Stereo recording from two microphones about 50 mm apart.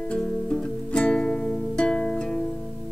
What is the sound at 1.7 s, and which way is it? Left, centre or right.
Music, centre.